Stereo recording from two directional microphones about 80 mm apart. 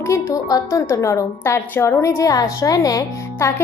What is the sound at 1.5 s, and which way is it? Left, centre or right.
A woman's voice, left.